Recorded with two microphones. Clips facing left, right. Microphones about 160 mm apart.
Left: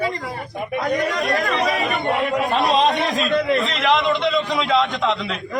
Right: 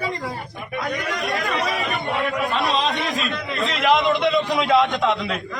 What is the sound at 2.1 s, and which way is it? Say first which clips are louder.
Speech: left 3 dB; 20° left (ahead or behind).